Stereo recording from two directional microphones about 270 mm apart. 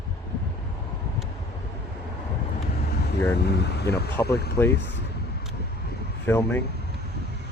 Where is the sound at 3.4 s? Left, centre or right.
Left.